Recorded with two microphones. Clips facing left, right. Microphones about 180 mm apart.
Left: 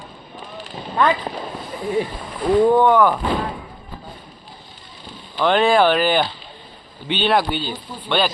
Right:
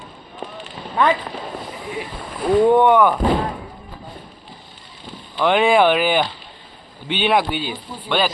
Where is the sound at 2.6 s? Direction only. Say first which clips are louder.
Right 2 dB; 20° right (ahead or behind).